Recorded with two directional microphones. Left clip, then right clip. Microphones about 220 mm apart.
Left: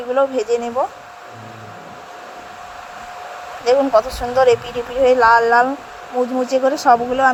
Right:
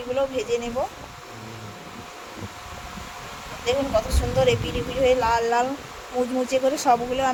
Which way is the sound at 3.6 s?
15° left (ahead or behind).